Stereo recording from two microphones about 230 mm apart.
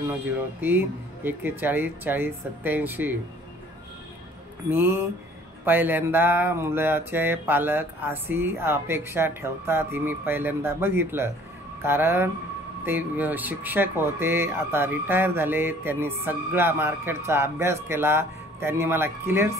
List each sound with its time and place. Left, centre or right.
0.0 s speech: centre
4.6 s speech: centre